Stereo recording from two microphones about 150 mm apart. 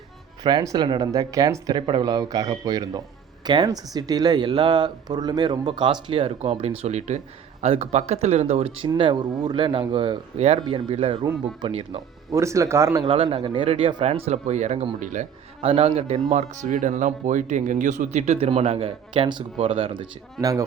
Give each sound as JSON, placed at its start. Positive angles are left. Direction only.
{"t": 0.4, "sound": "speech", "side_deg": -25}
{"t": 8.9, "sound": "speech", "side_deg": -30}
{"t": 12.3, "sound": "speech", "side_deg": -20}
{"t": 13.1, "sound": "speech", "side_deg": -35}
{"t": 15.6, "sound": "speech", "side_deg": -40}
{"t": 20.4, "sound": "speech", "side_deg": -25}